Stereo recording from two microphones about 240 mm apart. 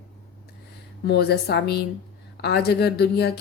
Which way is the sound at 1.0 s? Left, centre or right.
Left.